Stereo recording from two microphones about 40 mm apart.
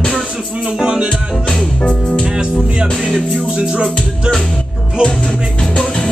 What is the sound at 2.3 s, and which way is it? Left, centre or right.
Music, right.